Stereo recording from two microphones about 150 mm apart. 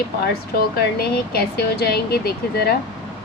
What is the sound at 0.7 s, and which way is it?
Speech, 90° left.